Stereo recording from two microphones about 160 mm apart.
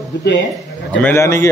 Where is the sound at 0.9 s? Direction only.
10° left (ahead or behind).